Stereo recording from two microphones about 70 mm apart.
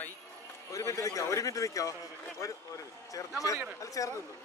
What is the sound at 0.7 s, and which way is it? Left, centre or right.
A man's voice, left.